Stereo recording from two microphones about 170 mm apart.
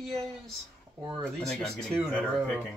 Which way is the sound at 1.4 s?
Centre (ahead or behind).